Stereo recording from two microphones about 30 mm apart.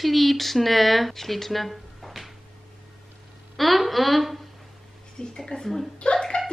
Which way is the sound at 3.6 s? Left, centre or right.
Centre.